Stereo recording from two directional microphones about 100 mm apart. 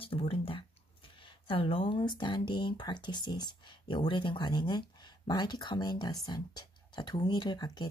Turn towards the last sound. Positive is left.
turn(degrees=45)  # may be behind; listen again after turning